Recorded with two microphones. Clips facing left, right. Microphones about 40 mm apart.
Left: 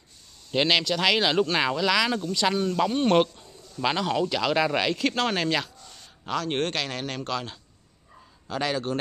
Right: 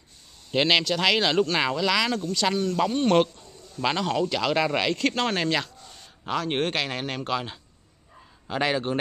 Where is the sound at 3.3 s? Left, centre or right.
Centre.